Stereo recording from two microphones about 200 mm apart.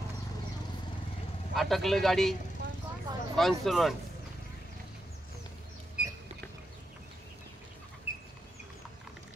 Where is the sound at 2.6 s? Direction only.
55° right (ahead or behind).